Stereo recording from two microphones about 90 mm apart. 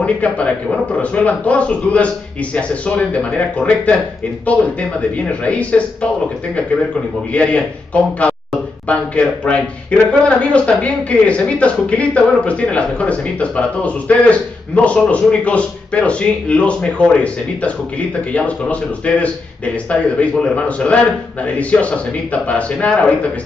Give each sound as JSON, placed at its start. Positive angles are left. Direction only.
{"t": 0.0, "sound": "speech", "side_deg": 15}
{"t": 5.4, "sound": "speech", "side_deg": 15}
{"t": 7.3, "sound": "speech", "side_deg": 15}